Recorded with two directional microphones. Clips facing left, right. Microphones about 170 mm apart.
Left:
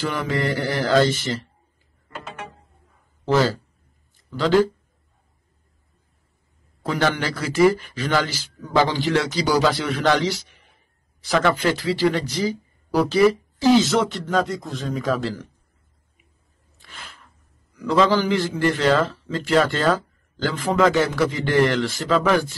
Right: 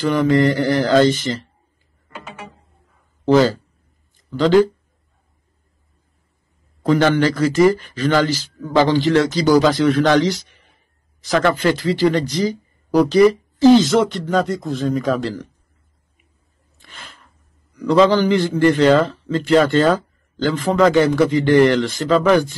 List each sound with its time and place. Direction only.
0.0 s a man's voice: 5° left (ahead or behind)
2.2 s music: 10° right (ahead or behind)
4.4 s a man's voice: 5° left (ahead or behind)
6.8 s a man's voice: 5° left (ahead or behind)
16.7 s a sound: centre (ahead or behind)
17.8 s a man's voice: centre (ahead or behind)